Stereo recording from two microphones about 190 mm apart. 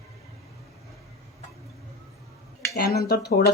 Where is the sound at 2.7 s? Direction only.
55° left (ahead or behind).